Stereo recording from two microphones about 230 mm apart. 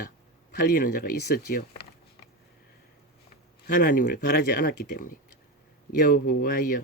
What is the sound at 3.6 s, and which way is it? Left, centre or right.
Speech, left.